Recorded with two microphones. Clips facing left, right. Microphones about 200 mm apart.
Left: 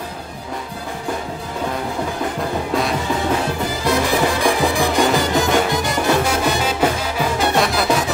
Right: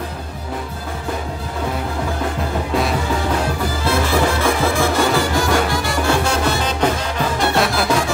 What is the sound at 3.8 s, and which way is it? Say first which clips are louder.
Music: even; 15° left (ahead or behind).